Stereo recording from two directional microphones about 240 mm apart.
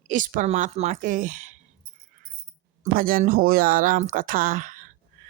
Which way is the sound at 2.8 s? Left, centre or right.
Right.